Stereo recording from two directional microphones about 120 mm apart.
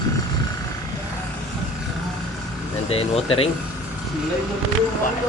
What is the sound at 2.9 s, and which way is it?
Speech, 55° left (ahead or behind).